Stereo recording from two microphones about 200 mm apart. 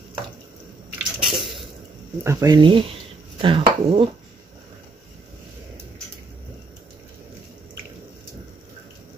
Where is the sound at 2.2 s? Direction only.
15° right (ahead or behind).